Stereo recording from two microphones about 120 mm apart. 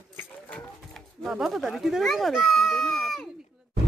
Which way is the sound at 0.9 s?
Centre (ahead or behind).